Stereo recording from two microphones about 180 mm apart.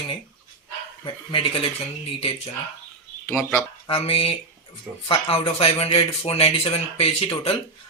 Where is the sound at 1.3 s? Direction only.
30° left (ahead or behind).